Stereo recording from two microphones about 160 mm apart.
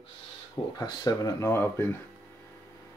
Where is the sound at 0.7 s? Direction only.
25° left (ahead or behind).